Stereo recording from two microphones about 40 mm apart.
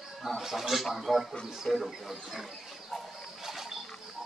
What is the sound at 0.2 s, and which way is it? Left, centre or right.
Speech, centre.